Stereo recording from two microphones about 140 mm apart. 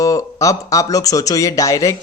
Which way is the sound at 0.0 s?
25° left (ahead or behind).